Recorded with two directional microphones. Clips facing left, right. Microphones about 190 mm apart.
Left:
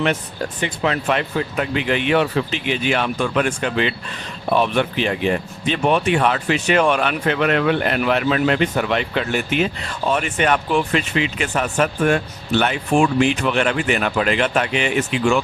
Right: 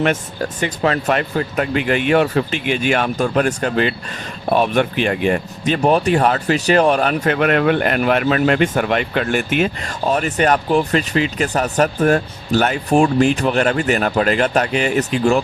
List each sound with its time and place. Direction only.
0.0 s speech: 45° right (ahead or behind)